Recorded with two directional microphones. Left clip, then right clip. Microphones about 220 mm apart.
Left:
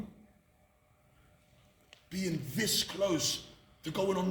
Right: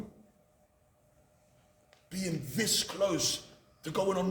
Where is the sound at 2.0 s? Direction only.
15° right (ahead or behind).